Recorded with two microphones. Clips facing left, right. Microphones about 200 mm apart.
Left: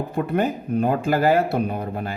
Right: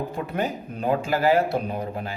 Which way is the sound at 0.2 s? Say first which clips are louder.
Left 8 dB; 55° left (ahead or behind).